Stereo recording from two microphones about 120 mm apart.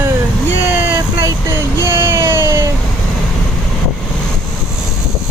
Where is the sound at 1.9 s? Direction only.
20° right (ahead or behind).